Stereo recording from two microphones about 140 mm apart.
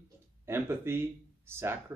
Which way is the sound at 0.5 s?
15° right (ahead or behind).